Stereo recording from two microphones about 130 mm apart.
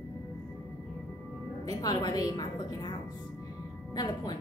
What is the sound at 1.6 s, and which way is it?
A woman's voice, 30° left (ahead or behind).